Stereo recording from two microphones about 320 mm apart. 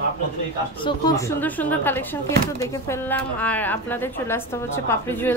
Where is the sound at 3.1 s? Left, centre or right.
Centre.